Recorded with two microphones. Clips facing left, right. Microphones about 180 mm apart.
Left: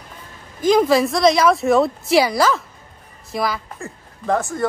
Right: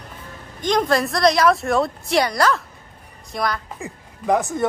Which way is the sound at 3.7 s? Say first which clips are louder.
Even; 15° right (ahead or behind).